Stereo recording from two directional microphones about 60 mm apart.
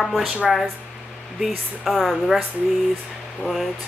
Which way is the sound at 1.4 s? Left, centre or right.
Centre.